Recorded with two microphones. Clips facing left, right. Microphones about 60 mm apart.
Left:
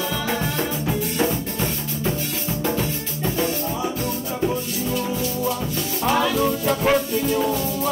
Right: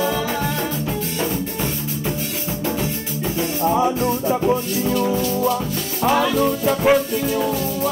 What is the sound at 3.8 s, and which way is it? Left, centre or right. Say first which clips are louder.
Music: right 7 dB; right.